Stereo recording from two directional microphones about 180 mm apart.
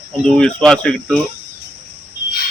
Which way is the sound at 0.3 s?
5° left (ahead or behind).